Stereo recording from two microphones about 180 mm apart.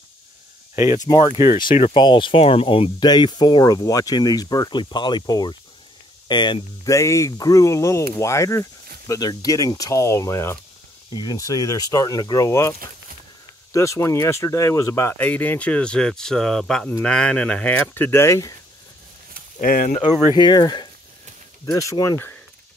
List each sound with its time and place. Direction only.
1.0 s speech: 25° left (ahead or behind)
13.7 s speech: 15° left (ahead or behind)
19.6 s speech: 50° left (ahead or behind)
20.3 s speech: 25° left (ahead or behind)